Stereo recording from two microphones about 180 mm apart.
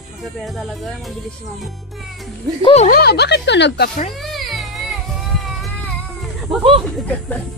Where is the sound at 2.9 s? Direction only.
60° left (ahead or behind).